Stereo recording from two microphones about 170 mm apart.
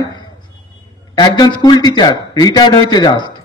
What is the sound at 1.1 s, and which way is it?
A man's voice, 25° left (ahead or behind).